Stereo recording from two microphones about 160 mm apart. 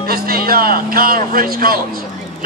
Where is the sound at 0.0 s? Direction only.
65° right (ahead or behind).